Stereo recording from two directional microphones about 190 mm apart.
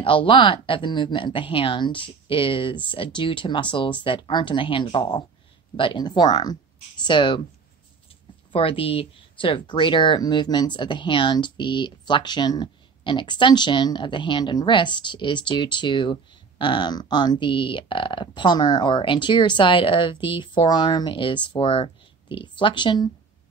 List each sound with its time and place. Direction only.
0.0 s speech: 25° left (ahead or behind)
8.5 s speech: 30° left (ahead or behind)